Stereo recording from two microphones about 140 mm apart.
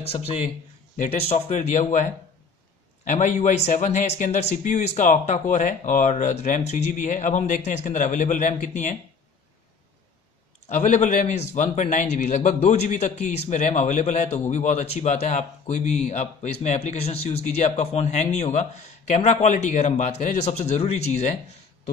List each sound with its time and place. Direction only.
0.1 s speech: 45° left (ahead or behind)
3.1 s speech: 60° left (ahead or behind)
10.7 s speech: 60° left (ahead or behind)